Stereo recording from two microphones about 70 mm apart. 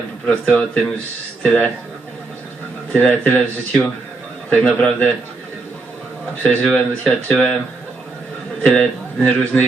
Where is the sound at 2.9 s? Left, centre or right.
Left.